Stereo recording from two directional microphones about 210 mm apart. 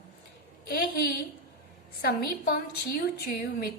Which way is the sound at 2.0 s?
45° left (ahead or behind).